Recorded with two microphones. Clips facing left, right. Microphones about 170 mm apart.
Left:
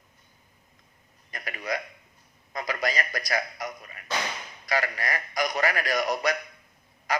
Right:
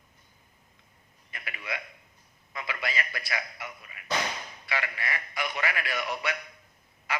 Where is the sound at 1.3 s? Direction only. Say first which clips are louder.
Left 6 dB; 40° left (ahead or behind).